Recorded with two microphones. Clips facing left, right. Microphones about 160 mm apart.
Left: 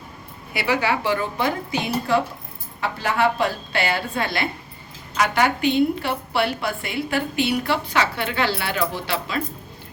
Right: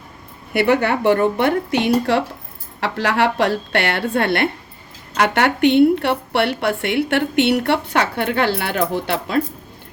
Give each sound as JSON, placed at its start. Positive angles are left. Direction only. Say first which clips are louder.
{"t": 0.5, "sound": "a woman's voice", "louder": "right 6 dB", "side_deg": -55}